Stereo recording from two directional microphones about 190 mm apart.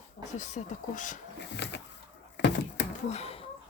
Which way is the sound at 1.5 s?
65° left (ahead or behind).